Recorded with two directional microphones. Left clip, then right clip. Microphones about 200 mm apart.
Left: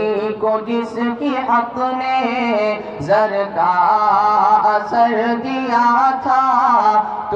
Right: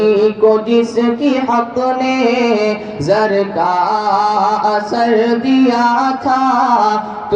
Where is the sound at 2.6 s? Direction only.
25° right (ahead or behind).